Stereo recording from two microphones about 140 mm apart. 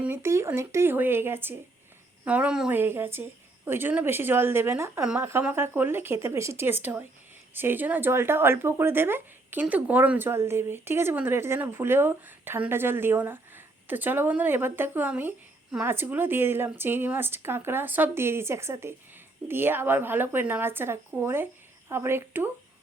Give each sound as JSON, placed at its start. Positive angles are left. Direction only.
{"t": 0.0, "sound": "speech", "side_deg": -15}